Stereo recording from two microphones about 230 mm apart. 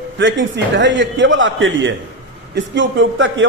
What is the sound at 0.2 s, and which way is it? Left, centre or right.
A man's voice, right.